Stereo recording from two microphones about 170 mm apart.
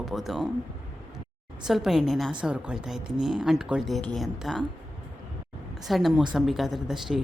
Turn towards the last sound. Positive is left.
turn(degrees=0)  # may be behind; listen again after turning